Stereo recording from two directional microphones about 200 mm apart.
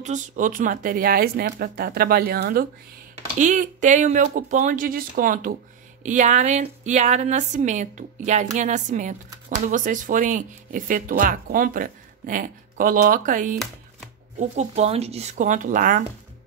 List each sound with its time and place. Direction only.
0.0 s speech: 40° right (ahead or behind)
3.3 s speech: 40° right (ahead or behind)